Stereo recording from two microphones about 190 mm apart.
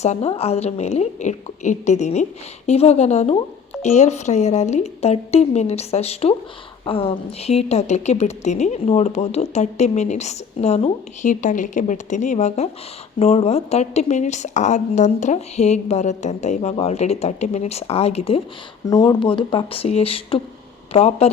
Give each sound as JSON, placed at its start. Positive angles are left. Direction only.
{"t": 0.0, "sound": "a woman's voice", "side_deg": 35}
{"t": 18.9, "sound": "a woman's voice", "side_deg": 20}